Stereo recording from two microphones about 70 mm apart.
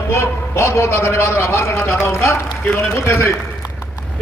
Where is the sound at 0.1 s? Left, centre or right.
Left.